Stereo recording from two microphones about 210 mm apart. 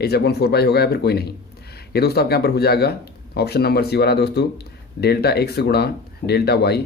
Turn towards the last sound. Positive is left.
turn(degrees=50)  # may be behind; listen again after turning